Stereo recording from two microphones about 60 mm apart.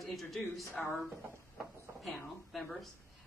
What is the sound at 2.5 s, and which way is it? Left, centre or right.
Speech, centre.